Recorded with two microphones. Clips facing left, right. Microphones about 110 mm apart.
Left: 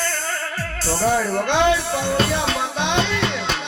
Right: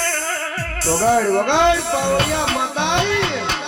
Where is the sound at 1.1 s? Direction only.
60° right (ahead or behind).